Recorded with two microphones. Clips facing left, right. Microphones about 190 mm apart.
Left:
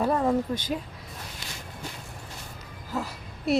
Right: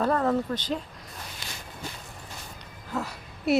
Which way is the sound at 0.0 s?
10° left (ahead or behind).